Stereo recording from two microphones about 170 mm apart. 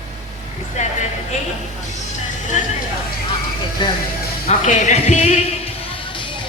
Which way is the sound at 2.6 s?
45° left (ahead or behind).